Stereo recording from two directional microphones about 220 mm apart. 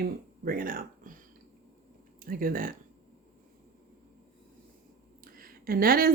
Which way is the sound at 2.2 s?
40° right (ahead or behind).